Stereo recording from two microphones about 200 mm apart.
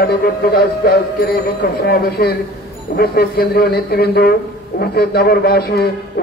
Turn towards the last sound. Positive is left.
turn(degrees=50)  # may be behind; listen again after turning